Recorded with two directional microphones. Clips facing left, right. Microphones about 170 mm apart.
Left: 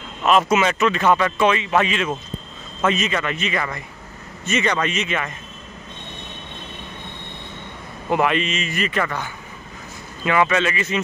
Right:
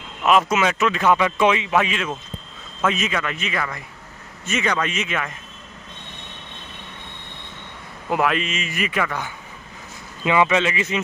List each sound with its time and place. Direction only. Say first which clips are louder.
0.2 s speech: left 1 dB; centre (ahead or behind)
8.1 s a man's voice: left 2 dB; centre (ahead or behind); by 11.0 s 15° right (ahead or behind)